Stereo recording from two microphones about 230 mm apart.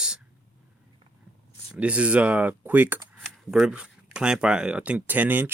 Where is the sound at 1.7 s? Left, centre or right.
Centre.